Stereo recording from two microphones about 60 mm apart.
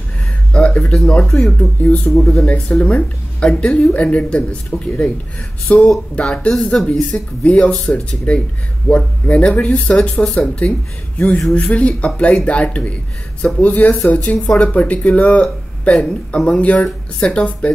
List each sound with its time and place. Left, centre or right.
0.5 s speech: centre